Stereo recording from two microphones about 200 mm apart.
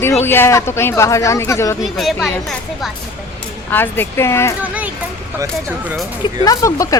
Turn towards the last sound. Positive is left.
turn(degrees=15)  # may be behind; listen again after turning